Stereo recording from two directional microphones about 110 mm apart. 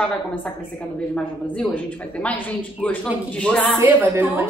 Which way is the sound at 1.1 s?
10° left (ahead or behind).